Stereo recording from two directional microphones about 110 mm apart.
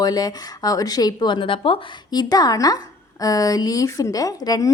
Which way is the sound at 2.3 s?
35° left (ahead or behind).